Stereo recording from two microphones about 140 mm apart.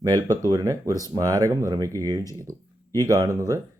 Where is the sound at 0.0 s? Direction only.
25° right (ahead or behind).